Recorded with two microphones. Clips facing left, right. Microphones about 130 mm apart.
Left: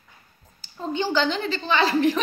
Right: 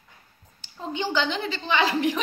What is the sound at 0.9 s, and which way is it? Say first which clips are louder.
A woman's voice: left 3 dB; 15° right (ahead or behind).